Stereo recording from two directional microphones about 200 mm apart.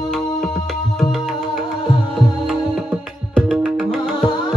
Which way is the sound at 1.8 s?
20° left (ahead or behind).